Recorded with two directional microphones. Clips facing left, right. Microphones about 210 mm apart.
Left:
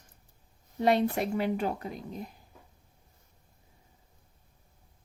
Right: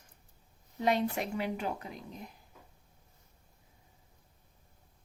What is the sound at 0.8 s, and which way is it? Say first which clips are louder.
Speech: left 4 dB; 40° left (ahead or behind).